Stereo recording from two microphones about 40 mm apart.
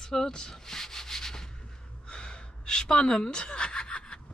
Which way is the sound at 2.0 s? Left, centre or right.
Left.